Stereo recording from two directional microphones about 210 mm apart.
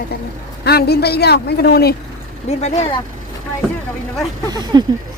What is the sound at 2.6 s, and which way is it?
Speech, 30° left (ahead or behind).